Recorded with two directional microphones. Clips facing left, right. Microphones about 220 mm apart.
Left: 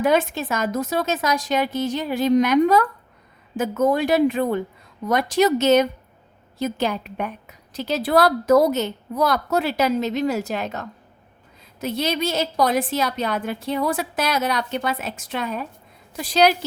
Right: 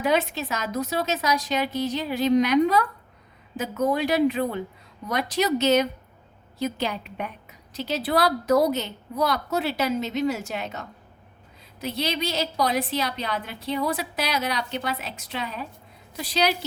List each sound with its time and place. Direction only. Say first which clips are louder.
0.0 s a woman's voice: left 4 dB; 50° left (ahead or behind)
3.9 s a woman's voice: left 3 dB; 50° left (ahead or behind)
11.8 s a woman's voice: left 4 dB; 50° left (ahead or behind)